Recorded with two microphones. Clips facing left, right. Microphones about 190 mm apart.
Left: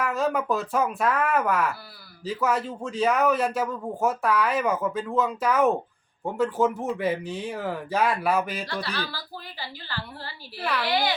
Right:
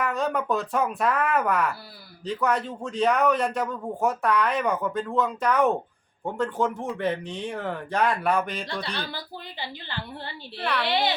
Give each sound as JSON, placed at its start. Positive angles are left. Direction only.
{"t": 0.0, "sound": "a man's voice", "side_deg": 0}
{"t": 9.1, "sound": "a woman's voice", "side_deg": -20}
{"t": 10.6, "sound": "a man's voice", "side_deg": 0}
{"t": 10.8, "sound": "a woman's voice", "side_deg": -25}